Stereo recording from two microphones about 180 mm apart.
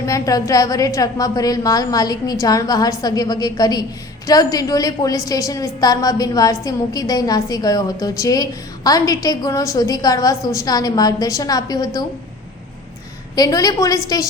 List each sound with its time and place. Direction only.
0.0 s a woman's voice: 20° left (ahead or behind)
13.3 s a woman's voice: 20° left (ahead or behind)